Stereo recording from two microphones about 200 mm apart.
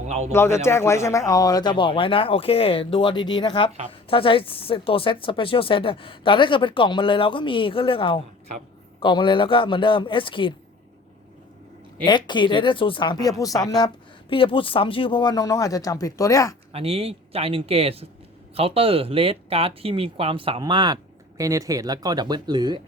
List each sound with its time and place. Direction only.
0.0 s speech: 35° right (ahead or behind)
0.3 s speech: 15° left (ahead or behind)
12.0 s speech: 20° left (ahead or behind)
16.7 s speech: 30° right (ahead or behind)